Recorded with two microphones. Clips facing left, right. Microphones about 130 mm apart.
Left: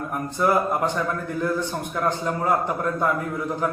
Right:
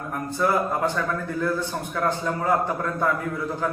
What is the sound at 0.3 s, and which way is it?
A man's voice, 20° left (ahead or behind).